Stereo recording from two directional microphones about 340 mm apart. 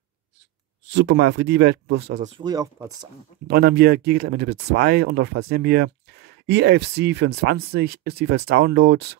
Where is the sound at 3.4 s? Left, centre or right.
Right.